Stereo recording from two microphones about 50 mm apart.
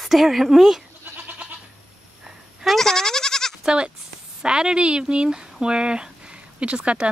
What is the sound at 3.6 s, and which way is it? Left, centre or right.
Speech, centre.